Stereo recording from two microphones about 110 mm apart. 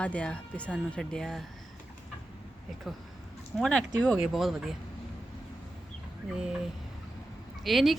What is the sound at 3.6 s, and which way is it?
Speech, 10° left (ahead or behind).